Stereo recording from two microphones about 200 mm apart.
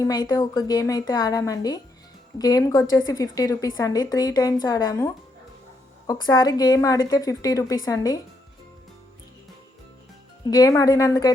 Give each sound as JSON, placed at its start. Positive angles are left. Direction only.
{"t": 0.0, "sound": "a woman's voice", "side_deg": 20}
{"t": 10.4, "sound": "a woman's voice", "side_deg": 20}